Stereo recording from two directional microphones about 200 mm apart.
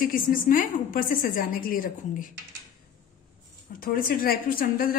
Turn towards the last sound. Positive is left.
turn(degrees=45)  # may be behind; listen again after turning